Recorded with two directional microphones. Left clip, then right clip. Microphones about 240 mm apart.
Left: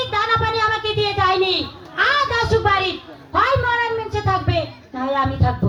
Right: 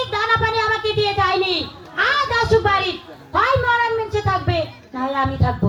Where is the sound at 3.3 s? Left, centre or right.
Right.